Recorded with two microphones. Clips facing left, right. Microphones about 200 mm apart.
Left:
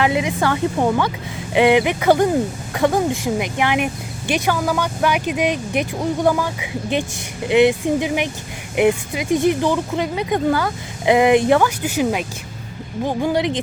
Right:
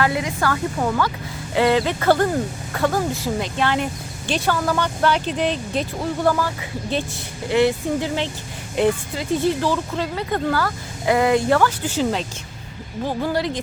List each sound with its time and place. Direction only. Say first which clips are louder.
0.0 s speech: left 3 dB; 20° left (ahead or behind)